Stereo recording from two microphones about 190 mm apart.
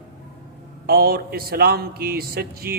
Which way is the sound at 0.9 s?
50° right (ahead or behind).